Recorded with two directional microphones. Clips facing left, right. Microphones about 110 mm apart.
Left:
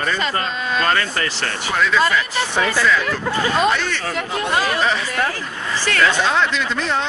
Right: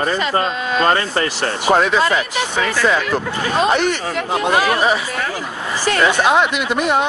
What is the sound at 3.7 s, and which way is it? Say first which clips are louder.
Speech: right 5 dB; 20° right (ahead or behind).